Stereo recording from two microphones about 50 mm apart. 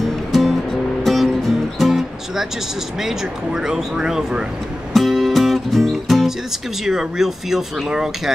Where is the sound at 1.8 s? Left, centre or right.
Centre.